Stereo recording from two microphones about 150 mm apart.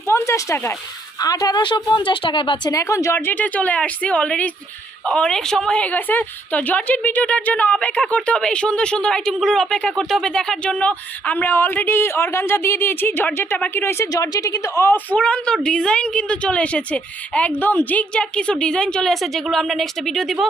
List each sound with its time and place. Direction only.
0.1 s a woman's voice: 20° left (ahead or behind); by 2.7 s 35° left (ahead or behind)
2.7 s a woman's voice: 20° left (ahead or behind); by 20.5 s centre (ahead or behind)